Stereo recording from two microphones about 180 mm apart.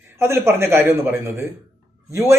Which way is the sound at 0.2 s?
15° right (ahead or behind).